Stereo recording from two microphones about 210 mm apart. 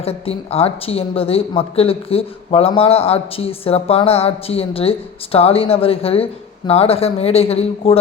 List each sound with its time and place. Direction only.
0.0 s speech: 30° left (ahead or behind)